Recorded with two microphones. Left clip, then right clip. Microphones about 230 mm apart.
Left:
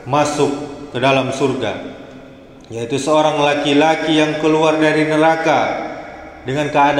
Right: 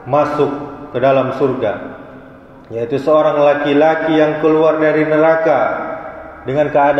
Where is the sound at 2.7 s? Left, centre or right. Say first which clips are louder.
Right 3 dB; centre.